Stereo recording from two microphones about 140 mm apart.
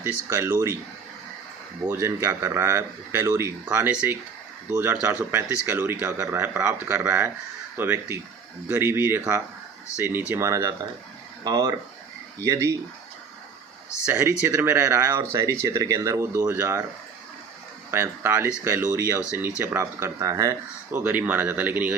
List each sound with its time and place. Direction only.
0.0 s speech: 15° right (ahead or behind)
1.9 s speech: 20° right (ahead or behind)
14.0 s speech: 15° right (ahead or behind)
17.9 s speech: 15° right (ahead or behind)